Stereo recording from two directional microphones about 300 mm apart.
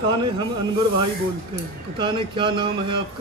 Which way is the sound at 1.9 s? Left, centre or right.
Centre.